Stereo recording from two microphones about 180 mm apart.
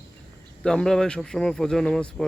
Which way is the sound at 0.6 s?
5° left (ahead or behind).